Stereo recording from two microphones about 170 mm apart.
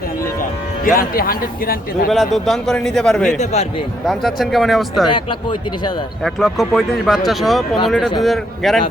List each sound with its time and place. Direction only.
0.9 s a man's voice: 60° left (ahead or behind)
2.0 s speech: centre (ahead or behind)
3.3 s a man's voice: 40° left (ahead or behind)
4.0 s speech: centre (ahead or behind)
5.1 s speech: 30° left (ahead or behind)
6.2 s speech: centre (ahead or behind)